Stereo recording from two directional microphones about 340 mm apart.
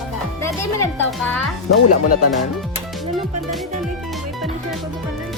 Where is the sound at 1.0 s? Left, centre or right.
Centre.